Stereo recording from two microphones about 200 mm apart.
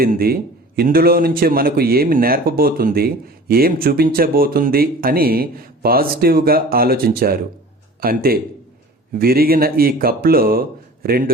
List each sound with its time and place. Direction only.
0.0 s speech: 45° right (ahead or behind)